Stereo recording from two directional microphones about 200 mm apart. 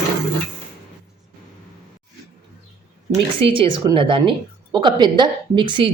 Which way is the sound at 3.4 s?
25° right (ahead or behind).